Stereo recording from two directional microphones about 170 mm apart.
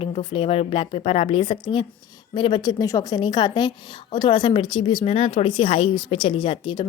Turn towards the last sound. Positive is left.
turn(degrees=30)  # may be behind; listen again after turning